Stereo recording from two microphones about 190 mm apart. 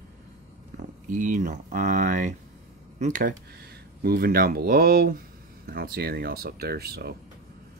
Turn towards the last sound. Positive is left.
turn(degrees=-55)  # may be behind; listen again after turning